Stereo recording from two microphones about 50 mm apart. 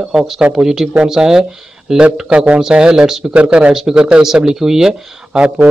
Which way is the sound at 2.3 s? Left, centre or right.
Right.